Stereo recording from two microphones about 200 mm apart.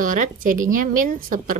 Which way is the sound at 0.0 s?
40° right (ahead or behind).